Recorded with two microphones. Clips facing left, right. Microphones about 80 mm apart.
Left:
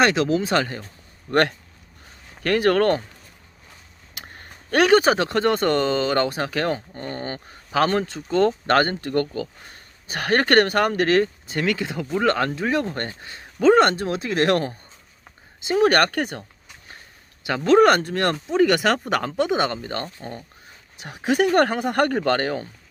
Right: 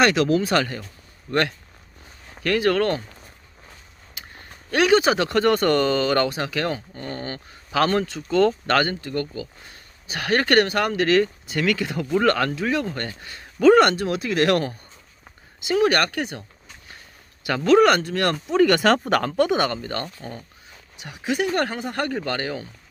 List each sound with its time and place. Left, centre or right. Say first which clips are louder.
0.0 s speech: right 1 dB; left
1.3 s speech: left 3 dB; left
4.1 s a sound: left 1 dB; left
5.1 s speech: right 1 dB; left
6.3 s speech: left 2 dB; left
9.0 s speech: left 4 dB; left
9.7 s speech: left 1 dB; left
12.5 s speech: left 1 dB; left
15.8 s speech: left 3 dB; left
17.4 s speech: right 1 dB; centre
17.7 s speech: left 1 dB; left
18.5 s speech: right 2 dB; centre; by 20.4 s left
21.0 s speech: left 4 dB; left